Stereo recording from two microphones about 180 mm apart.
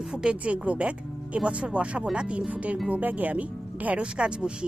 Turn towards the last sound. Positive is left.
turn(degrees=-5)  # may be behind; listen again after turning